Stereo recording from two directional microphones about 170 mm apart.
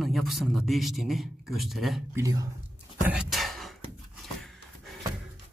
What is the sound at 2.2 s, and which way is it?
Speech, 20° right (ahead or behind).